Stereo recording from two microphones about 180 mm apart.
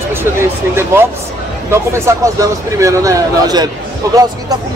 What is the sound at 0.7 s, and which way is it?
Speech, 15° right (ahead or behind).